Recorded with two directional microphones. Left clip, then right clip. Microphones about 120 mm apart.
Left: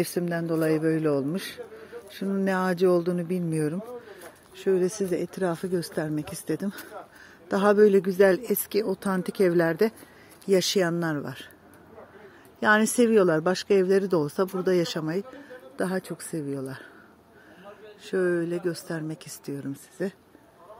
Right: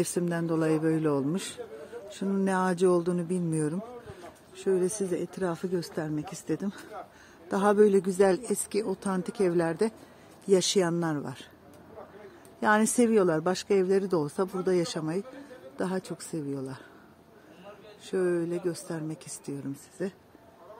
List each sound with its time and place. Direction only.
0.0 s a man's voice: centre (ahead or behind)
2.4 s a woman's voice: 10° left (ahead or behind); by 9.9 s 30° left (ahead or behind)
10.5 s speech: 15° left (ahead or behind)
12.5 s a woman's voice: 20° left (ahead or behind)
18.0 s a woman's voice: 30° left (ahead or behind)